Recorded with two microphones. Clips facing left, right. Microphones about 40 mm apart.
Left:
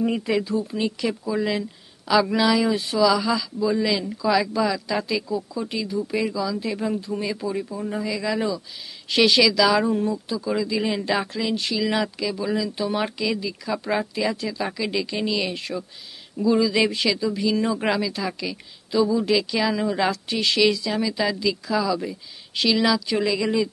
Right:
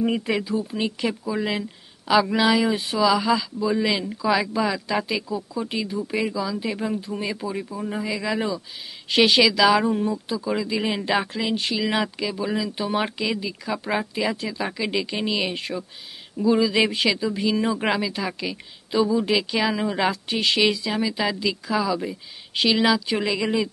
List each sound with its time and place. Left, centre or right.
0.0 s speech: centre